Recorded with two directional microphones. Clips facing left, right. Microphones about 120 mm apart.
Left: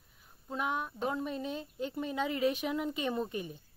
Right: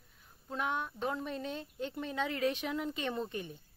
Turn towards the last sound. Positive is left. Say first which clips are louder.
# left 3 dB
turn(degrees=10)  # may be behind; listen again after turning